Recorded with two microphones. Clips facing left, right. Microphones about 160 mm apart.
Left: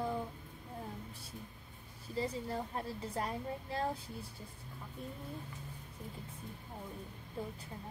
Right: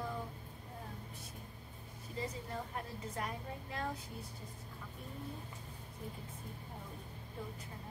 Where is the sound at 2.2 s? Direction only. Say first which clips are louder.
Left 5 dB; 35° left (ahead or behind).